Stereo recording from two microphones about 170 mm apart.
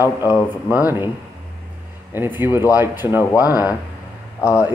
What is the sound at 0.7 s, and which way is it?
Speech, 10° right (ahead or behind).